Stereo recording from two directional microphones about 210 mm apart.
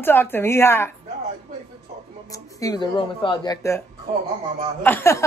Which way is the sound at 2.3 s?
15° left (ahead or behind).